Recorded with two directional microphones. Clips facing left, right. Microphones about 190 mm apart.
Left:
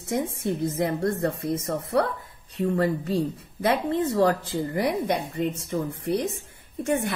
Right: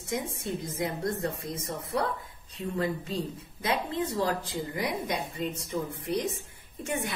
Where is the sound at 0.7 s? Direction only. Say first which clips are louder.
Left 6 dB; 65° left (ahead or behind).